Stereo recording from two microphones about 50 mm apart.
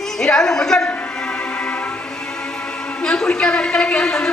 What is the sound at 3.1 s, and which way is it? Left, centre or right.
A man's voice, centre.